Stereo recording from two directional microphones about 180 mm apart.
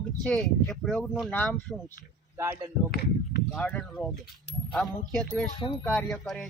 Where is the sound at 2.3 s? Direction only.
15° right (ahead or behind).